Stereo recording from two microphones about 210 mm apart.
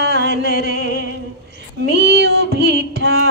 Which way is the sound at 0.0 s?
50° right (ahead or behind).